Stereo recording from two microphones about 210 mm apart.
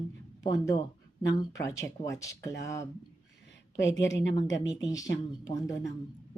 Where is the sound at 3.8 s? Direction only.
60° left (ahead or behind).